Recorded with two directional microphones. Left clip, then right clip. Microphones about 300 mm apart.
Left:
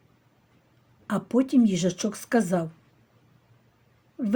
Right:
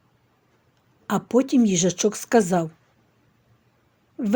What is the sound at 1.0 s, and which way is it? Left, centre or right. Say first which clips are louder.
Speech: right 4 dB; right.